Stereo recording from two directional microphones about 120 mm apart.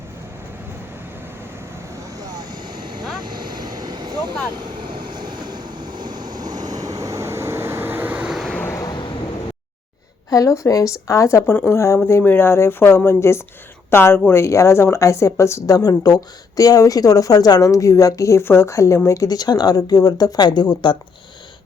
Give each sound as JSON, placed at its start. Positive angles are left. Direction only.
{"t": 2.7, "sound": "vehicle", "side_deg": -40}
{"t": 8.5, "sound": "vehicle", "side_deg": 20}
{"t": 10.2, "sound": "a woman's voice", "side_deg": 30}